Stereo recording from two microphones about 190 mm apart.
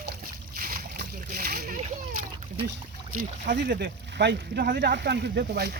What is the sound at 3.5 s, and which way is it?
Speech, 55° right (ahead or behind).